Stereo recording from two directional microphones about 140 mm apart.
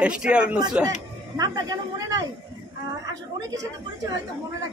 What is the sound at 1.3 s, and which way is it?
A man's voice, 25° right (ahead or behind).